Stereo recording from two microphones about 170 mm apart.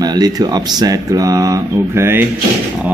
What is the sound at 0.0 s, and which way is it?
Speech, 25° right (ahead or behind).